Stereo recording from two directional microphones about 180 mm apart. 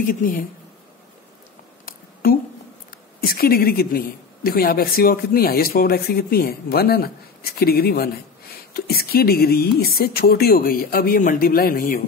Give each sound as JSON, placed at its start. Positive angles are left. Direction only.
{"t": 0.0, "sound": "speech", "side_deg": 50}
{"t": 3.3, "sound": "a woman's voice", "side_deg": 55}